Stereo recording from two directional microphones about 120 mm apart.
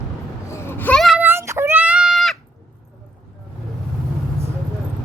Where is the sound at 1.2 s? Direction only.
20° right (ahead or behind); by 2.3 s centre (ahead or behind).